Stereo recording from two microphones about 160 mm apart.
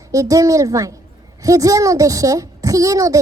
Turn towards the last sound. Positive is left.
turn(degrees=-20)  # may be behind; listen again after turning